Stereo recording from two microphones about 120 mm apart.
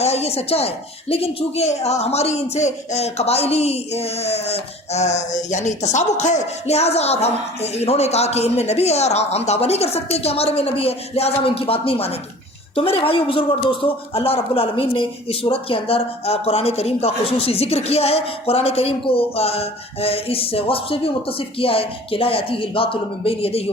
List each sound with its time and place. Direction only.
0.0 s speech: 60° left (ahead or behind)